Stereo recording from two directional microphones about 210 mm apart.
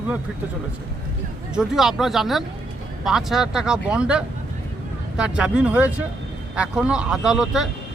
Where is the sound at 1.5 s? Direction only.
Centre (ahead or behind).